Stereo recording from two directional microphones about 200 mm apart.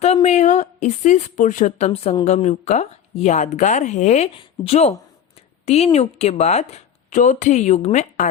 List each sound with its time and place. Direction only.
0.0 s speech: 35° left (ahead or behind)